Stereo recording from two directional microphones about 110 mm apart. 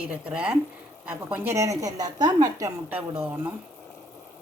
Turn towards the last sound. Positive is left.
turn(degrees=-20)  # may be behind; listen again after turning